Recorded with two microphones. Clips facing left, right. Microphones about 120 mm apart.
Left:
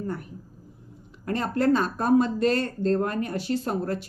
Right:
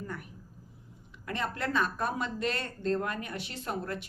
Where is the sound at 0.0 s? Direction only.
35° left (ahead or behind).